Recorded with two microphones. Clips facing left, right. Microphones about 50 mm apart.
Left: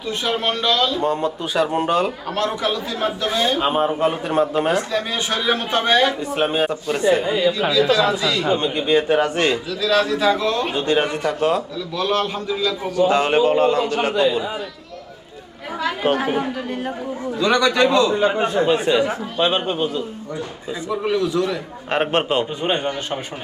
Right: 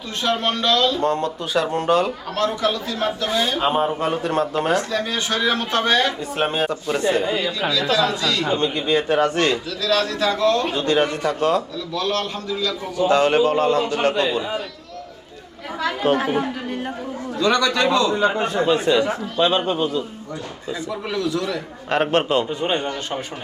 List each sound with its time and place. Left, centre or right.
0.3 s speech: centre
3.6 s speech: centre
7.0 s a man's voice: centre
16.1 s a woman's voice: centre
17.4 s speech: centre
21.1 s a man's voice: left